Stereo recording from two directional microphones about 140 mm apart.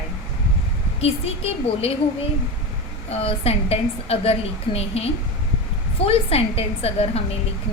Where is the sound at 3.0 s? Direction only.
45° left (ahead or behind).